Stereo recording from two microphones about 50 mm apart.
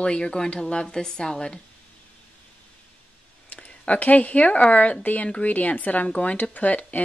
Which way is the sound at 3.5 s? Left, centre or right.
Left.